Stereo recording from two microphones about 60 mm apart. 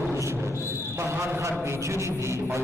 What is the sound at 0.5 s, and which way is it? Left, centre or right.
Speech, left.